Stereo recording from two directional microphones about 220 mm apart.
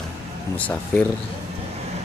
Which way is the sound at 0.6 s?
5° left (ahead or behind).